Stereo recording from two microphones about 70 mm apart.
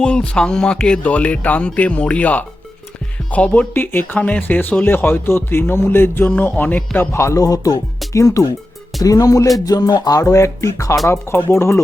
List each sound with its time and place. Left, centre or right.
0.0 s speech: centre
3.8 s speech: left
7.1 s speech: left
9.6 s music: left
11.0 s speech: left